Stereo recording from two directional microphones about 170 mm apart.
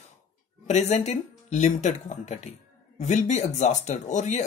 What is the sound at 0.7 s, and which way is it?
Speech, 40° left (ahead or behind).